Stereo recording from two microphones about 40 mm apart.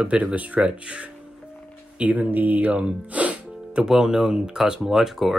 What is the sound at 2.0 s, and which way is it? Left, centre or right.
Speech, right.